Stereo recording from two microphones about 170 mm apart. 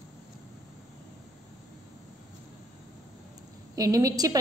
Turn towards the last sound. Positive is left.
turn(degrees=-20)  # may be behind; listen again after turning